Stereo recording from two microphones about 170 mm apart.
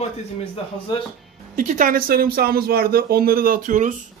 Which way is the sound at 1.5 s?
50° right (ahead or behind).